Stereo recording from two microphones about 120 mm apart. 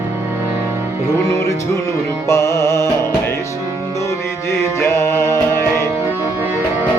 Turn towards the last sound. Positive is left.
turn(degrees=20)  # may be behind; listen again after turning